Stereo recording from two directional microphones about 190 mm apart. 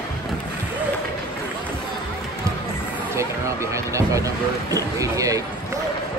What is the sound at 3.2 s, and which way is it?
Speech, 15° right (ahead or behind).